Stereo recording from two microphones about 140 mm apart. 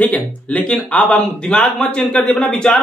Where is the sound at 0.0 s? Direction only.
10° left (ahead or behind).